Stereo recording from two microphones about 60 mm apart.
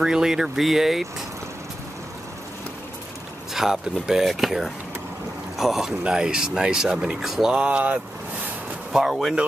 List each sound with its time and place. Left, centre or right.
0.0 s speech: centre
3.5 s speech: centre
7.5 s speech: right
8.9 s speech: centre